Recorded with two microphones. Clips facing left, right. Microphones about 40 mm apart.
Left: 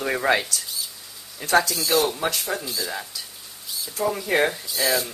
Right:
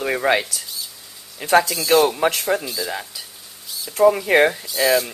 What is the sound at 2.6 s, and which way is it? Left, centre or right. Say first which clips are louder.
Speech: right 3 dB; centre.